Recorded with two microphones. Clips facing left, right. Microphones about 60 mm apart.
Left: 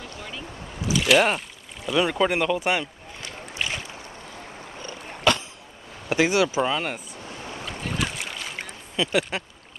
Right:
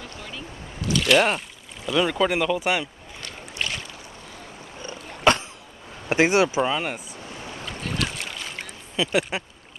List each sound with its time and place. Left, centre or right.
0.2 s boat: centre
1.9 s speech: centre
3.2 s boat: centre
5.3 s a sound: right
6.0 s speech: right
6.6 s speech: centre
7.6 s boat: centre
8.9 s speech: centre